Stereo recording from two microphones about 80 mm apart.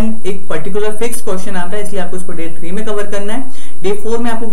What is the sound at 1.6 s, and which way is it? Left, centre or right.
A woman's voice, centre.